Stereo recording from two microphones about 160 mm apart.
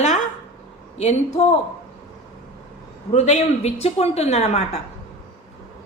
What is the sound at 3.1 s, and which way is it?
A woman's voice, 45° left (ahead or behind).